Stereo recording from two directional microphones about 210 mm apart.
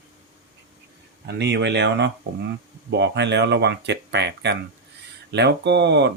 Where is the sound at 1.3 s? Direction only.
55° right (ahead or behind).